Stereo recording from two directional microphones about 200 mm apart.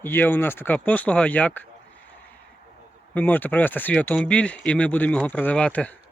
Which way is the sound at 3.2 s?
10° left (ahead or behind).